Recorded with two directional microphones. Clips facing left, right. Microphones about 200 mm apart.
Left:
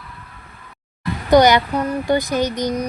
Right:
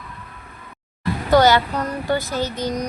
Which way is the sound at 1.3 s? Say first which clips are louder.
Left 3 dB; 15° left (ahead or behind).